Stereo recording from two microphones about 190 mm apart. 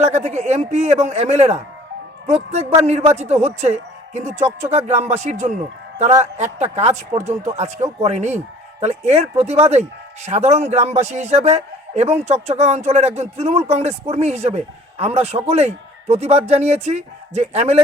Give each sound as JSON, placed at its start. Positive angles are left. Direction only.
{"t": 0.0, "sound": "a man's voice", "side_deg": -35}